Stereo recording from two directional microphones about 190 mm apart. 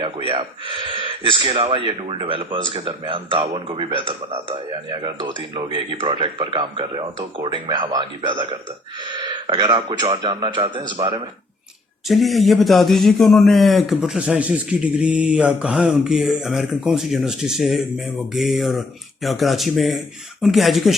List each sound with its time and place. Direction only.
0.0 s speech: 30° right (ahead or behind)
12.0 s a man's voice: centre (ahead or behind)